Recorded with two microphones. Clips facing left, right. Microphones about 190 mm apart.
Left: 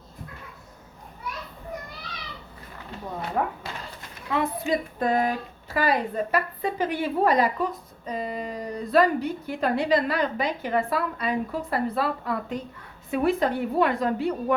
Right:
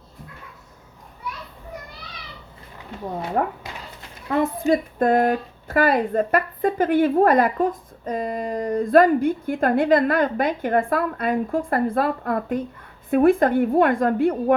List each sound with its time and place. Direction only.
3.4 s speech: 50° right (ahead or behind)